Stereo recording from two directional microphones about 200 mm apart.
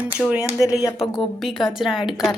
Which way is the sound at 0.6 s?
15° left (ahead or behind).